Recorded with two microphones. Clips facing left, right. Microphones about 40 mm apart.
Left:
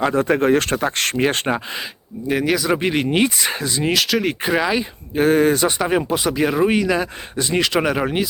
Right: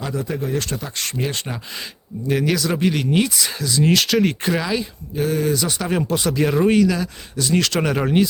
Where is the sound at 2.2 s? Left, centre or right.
Centre.